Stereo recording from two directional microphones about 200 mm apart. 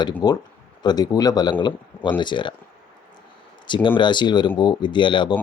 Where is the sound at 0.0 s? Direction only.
20° left (ahead or behind).